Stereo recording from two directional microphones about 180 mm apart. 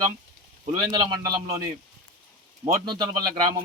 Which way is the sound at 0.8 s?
25° right (ahead or behind).